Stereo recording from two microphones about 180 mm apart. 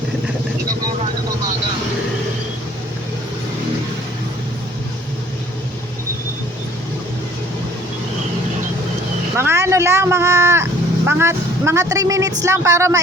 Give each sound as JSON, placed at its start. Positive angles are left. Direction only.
{"t": 9.4, "sound": "vehicle", "side_deg": -15}
{"t": 12.4, "sound": "speech", "side_deg": -15}